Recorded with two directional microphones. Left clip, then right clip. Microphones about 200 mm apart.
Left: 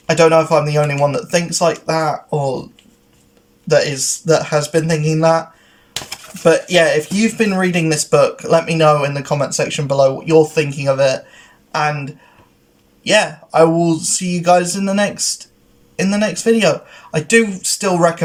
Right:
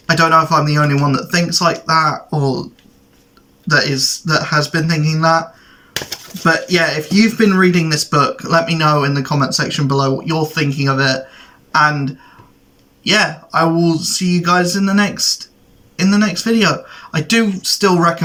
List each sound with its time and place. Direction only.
0.1 s speech: 15° left (ahead or behind)
3.8 s speech: 15° left (ahead or behind)